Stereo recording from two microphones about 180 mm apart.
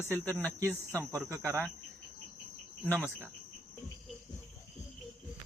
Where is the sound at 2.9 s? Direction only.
5° right (ahead or behind).